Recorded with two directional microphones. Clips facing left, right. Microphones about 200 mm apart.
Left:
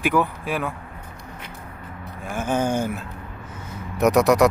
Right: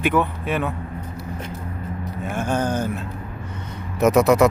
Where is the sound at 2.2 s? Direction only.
5° left (ahead or behind).